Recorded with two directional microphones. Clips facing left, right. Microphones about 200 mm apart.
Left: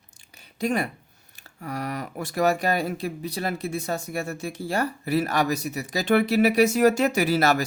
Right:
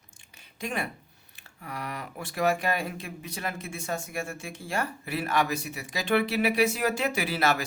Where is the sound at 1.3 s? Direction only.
40° left (ahead or behind).